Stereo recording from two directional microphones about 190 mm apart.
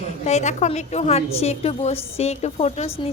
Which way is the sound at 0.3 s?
35° left (ahead or behind).